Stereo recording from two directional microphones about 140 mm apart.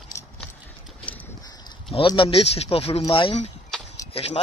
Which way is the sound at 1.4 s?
30° left (ahead or behind).